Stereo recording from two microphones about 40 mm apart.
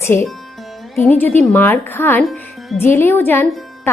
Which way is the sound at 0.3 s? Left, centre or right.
Centre.